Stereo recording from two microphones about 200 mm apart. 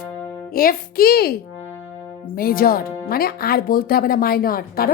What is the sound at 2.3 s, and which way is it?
Speech, 50° left (ahead or behind).